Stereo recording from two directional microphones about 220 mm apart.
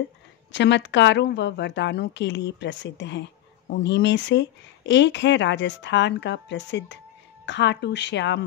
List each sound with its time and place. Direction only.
0.5 s speech: 55° left (ahead or behind)